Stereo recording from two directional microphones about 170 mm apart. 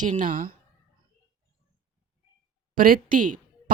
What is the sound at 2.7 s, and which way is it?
Speech, 55° right (ahead or behind).